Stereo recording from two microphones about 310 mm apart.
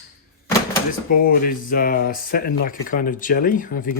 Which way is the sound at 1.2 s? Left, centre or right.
Left.